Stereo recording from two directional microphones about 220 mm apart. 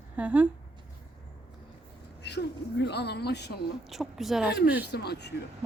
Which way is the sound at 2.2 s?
50° left (ahead or behind).